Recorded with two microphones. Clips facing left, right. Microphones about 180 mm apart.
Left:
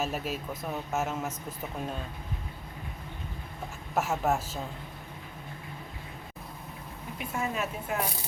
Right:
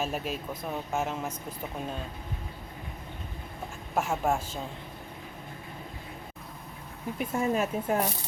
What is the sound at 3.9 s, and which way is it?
Speech, 5° left (ahead or behind).